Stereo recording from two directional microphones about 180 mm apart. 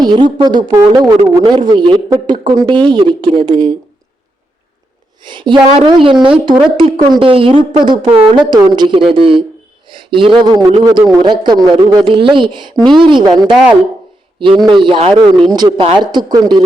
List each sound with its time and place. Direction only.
0.0 s a woman's voice: 25° right (ahead or behind)
5.2 s speech: 25° right (ahead or behind)
9.9 s a sound: 30° right (ahead or behind)
10.8 s speech: 25° right (ahead or behind)
14.3 s speech: 25° right (ahead or behind)